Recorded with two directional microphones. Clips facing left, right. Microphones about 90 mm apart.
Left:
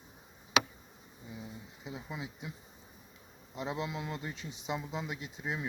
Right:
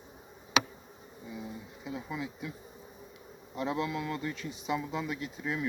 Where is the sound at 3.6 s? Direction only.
20° left (ahead or behind).